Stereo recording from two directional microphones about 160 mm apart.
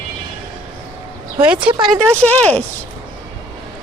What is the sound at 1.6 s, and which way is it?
Speech, 30° right (ahead or behind).